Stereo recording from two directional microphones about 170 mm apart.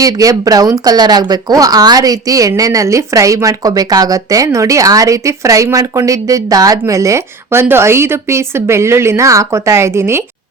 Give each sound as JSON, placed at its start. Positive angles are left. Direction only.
{"t": 0.0, "sound": "speech", "side_deg": -20}